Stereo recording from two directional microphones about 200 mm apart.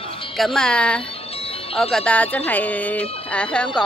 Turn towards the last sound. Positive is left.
turn(degrees=5)  # may be behind; listen again after turning